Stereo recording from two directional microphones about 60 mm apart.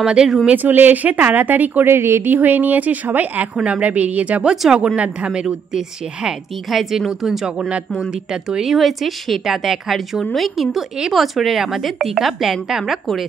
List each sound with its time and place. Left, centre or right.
0.0 s a woman's voice: centre
0.6 s speech: right
2.0 s a woman's voice: right
2.3 s a woman's voice: right; by 13.2 s centre